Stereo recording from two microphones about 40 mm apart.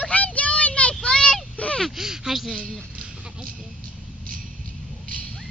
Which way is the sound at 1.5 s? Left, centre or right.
Left.